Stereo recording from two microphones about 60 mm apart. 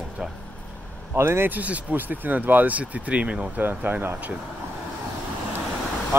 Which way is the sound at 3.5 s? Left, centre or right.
Right.